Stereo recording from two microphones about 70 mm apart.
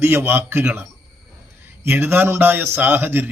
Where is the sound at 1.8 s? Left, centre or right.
Right.